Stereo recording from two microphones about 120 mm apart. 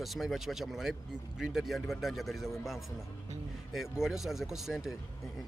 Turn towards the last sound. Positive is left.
turn(degrees=-5)  # may be behind; listen again after turning